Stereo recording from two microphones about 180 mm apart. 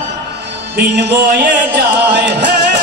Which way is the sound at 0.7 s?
70° right (ahead or behind).